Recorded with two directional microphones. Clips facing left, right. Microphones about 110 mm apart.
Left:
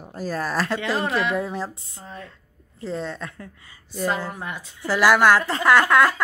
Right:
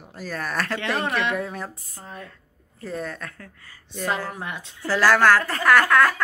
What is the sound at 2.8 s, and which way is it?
Speech, 25° left (ahead or behind).